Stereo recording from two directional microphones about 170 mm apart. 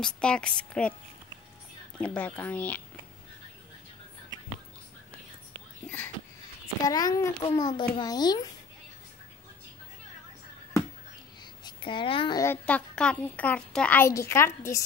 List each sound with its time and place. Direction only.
0.0 s a woman's voice: 5° left (ahead or behind)
2.0 s a child's voice: 10° left (ahead or behind)
5.9 s speech: 10° left (ahead or behind)
6.8 s a child's voice: 20° left (ahead or behind)
11.6 s a child's voice: 30° left (ahead or behind)
12.6 s a child's voice: 5° left (ahead or behind)